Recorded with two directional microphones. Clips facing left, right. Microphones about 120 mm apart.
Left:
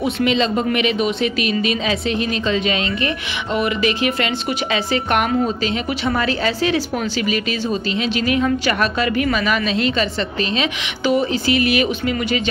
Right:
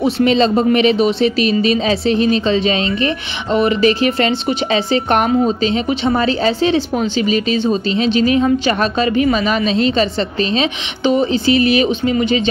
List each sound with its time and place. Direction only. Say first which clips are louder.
0.0 s a woman's voice: right 5 dB; 35° right (ahead or behind)